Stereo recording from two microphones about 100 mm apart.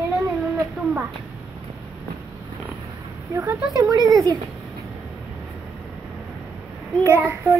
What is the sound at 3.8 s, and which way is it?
Speech, 35° right (ahead or behind).